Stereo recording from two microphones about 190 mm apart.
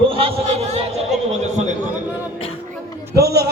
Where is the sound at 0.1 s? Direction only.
30° right (ahead or behind).